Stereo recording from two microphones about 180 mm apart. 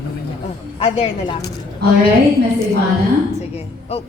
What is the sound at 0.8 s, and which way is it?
Speech, 35° left (ahead or behind).